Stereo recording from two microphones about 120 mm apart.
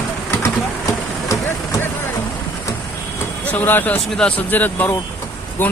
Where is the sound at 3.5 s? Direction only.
15° left (ahead or behind).